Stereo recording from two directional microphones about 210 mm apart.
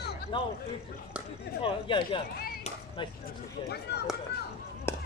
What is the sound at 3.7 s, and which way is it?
Speech, 50° left (ahead or behind).